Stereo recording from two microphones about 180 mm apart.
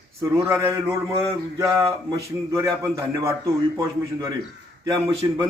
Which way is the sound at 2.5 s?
20° right (ahead or behind).